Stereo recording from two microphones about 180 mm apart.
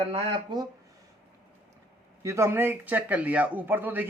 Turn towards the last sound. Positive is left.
turn(degrees=-10)  # may be behind; listen again after turning